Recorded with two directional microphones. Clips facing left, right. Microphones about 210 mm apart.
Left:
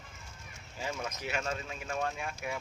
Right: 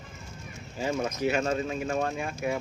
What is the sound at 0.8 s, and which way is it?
Speech, 40° right (ahead or behind).